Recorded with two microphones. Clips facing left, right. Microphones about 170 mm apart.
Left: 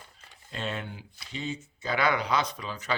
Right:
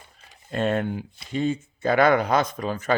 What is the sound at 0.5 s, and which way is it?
Speech, 50° right (ahead or behind).